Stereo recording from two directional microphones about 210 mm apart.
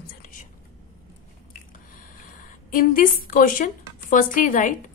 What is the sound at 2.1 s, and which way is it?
Speech, 40° left (ahead or behind).